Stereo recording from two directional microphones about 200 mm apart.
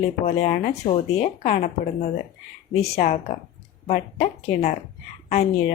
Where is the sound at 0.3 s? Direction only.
35° left (ahead or behind).